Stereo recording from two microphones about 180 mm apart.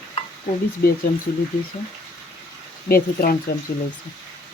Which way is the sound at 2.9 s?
50° left (ahead or behind).